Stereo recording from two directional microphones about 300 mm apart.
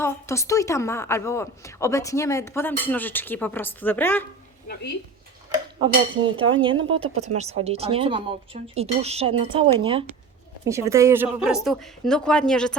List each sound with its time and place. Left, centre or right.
0.0 s a woman's voice: centre
5.8 s dishes: centre
6.9 s speech: right
9.7 s dishes: centre
10.7 s a woman's voice: centre